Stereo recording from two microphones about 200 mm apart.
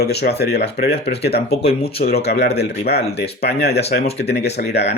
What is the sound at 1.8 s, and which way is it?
Speech, 50° left (ahead or behind).